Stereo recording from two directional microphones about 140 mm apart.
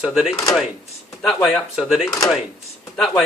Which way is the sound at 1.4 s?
Centre (ahead or behind).